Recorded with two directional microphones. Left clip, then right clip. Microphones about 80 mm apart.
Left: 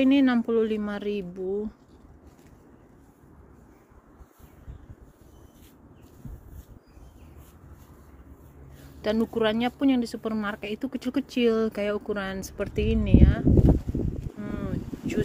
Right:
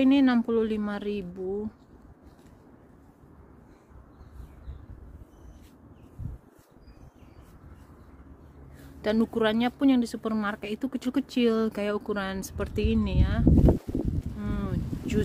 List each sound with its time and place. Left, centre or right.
0.0 s speech: centre
9.0 s speech: right
14.4 s boat: right